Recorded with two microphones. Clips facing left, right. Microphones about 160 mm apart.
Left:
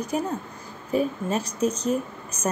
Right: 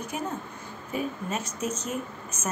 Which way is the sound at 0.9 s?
35° left (ahead or behind).